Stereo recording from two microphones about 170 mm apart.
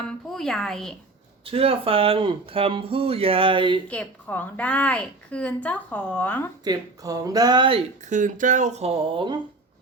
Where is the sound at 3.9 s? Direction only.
10° left (ahead or behind).